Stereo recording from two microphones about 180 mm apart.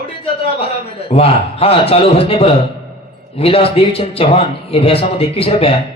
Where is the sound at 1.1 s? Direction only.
35° left (ahead or behind).